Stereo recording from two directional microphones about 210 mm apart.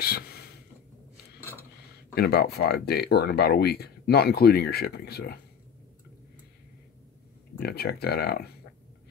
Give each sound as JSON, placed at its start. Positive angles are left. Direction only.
{"t": 0.0, "sound": "speech", "side_deg": 45}
{"t": 2.1, "sound": "speech", "side_deg": 50}
{"t": 7.6, "sound": "speech", "side_deg": 50}